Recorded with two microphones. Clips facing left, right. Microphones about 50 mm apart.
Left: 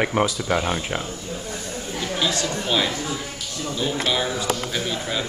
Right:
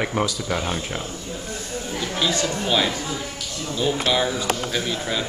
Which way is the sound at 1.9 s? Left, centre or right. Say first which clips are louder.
Even; centre.